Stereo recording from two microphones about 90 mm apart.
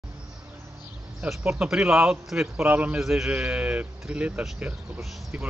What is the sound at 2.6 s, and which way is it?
Speech, 20° right (ahead or behind).